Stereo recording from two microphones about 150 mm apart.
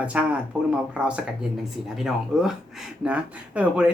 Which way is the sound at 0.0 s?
10° right (ahead or behind).